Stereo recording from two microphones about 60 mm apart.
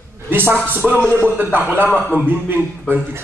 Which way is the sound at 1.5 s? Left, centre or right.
Right.